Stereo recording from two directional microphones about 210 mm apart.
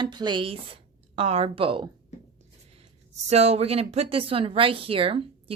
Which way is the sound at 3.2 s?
30° right (ahead or behind).